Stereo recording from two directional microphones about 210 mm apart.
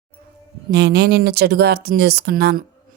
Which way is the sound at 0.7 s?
55° right (ahead or behind).